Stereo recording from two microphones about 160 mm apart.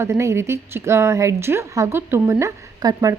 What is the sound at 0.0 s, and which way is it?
A woman's voice, 15° right (ahead or behind).